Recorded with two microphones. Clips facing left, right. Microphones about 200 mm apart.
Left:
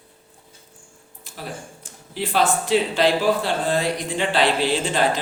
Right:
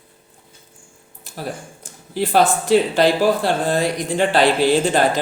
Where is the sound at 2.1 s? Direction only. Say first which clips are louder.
Right 4 dB; 45° right (ahead or behind).